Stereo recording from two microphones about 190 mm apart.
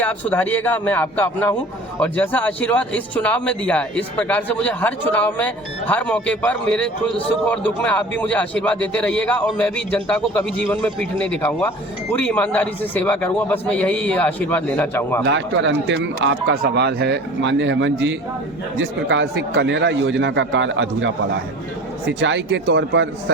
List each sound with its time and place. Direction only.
0.0 s a man's voice: 10° left (ahead or behind)
15.2 s speech: 70° right (ahead or behind)
22.2 s speech: 70° right (ahead or behind)